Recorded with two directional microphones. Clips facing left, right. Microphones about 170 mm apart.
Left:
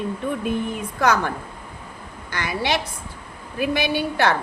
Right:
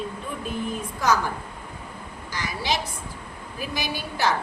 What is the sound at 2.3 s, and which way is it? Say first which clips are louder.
A woman's voice: left 4 dB; 60° left (ahead or behind).